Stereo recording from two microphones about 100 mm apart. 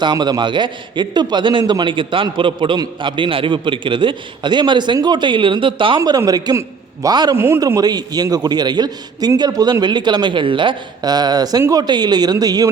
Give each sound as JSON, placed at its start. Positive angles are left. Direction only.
{"t": 0.0, "sound": "a man's voice", "side_deg": -45}
{"t": 6.0, "sound": "a man's voice", "side_deg": -35}
{"t": 7.3, "sound": "a man's voice", "side_deg": -25}
{"t": 7.8, "sound": "a man's voice", "side_deg": -40}